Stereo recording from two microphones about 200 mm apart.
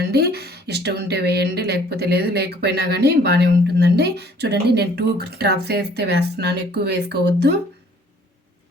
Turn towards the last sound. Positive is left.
turn(degrees=-55)  # may be behind; listen again after turning